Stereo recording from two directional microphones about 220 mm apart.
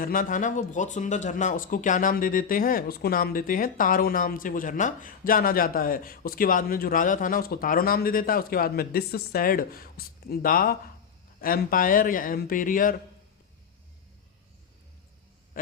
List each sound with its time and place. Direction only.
0.0 s speech: 40° left (ahead or behind)